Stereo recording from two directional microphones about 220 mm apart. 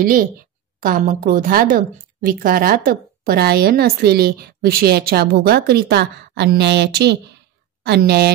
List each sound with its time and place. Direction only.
0.0 s a woman's voice: 40° right (ahead or behind)